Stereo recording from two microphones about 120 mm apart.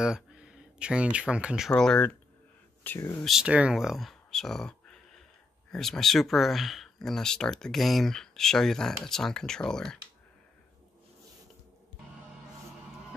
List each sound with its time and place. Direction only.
0.0 s speech: 5° right (ahead or behind)
1.7 s speech: 5° left (ahead or behind)
3.3 s speech: 5° right (ahead or behind)